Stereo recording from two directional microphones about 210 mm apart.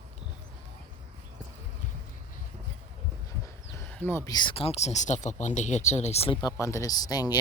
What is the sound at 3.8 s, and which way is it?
Speech, 10° left (ahead or behind).